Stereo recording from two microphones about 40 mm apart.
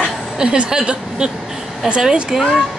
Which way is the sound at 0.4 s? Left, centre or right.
Right.